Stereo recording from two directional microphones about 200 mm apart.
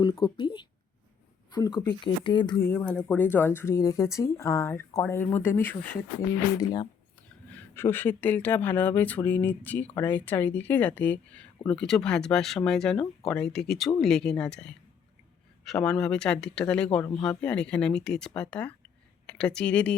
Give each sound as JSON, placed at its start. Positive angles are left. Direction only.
{"t": 0.0, "sound": "speech", "side_deg": 25}
{"t": 2.6, "sound": "speech", "side_deg": 10}
{"t": 7.8, "sound": "speech", "side_deg": 10}